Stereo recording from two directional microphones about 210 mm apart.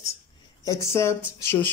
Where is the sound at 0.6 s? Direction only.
15° left (ahead or behind).